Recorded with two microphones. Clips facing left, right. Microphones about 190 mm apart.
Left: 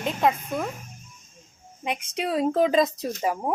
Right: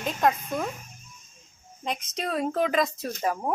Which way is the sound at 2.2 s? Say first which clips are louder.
Left 4 dB; 15° left (ahead or behind).